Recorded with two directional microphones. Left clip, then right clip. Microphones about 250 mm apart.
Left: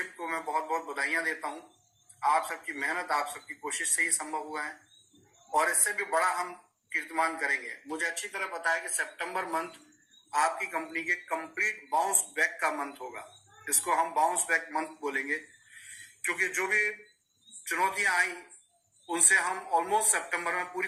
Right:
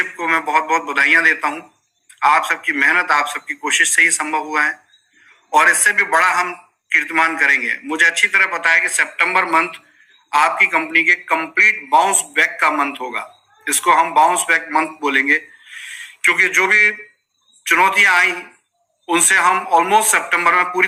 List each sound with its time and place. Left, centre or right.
0.0 s a man's voice: right